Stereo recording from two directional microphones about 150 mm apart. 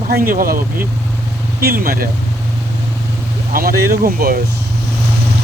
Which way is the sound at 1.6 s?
85° right.